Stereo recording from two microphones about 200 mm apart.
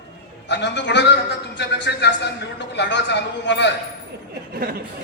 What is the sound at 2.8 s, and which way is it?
Speech, 60° left (ahead or behind).